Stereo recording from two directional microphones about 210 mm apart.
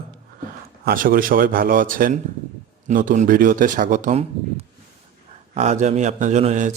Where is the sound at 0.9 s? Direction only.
40° right (ahead or behind).